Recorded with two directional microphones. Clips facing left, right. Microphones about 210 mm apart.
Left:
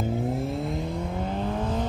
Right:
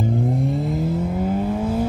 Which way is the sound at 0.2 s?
Centre (ahead or behind).